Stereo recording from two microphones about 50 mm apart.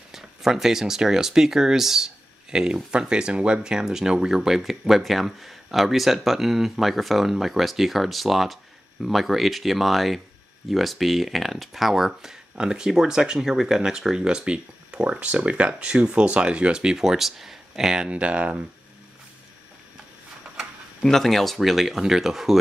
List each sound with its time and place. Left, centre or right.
0.1 s speech: centre
18.1 s speech: right
21.0 s speech: centre